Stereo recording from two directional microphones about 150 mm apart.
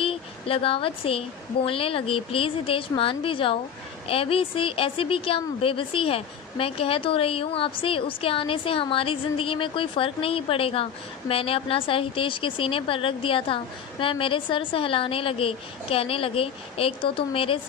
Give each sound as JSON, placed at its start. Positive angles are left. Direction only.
{"t": 0.0, "sound": "a woman's voice", "side_deg": 40}